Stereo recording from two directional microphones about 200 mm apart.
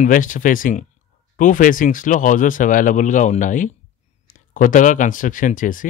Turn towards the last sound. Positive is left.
turn(degrees=40)  # may be behind; listen again after turning